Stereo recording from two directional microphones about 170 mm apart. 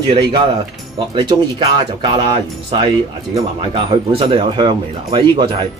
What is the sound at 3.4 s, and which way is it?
A man's voice, 35° right (ahead or behind).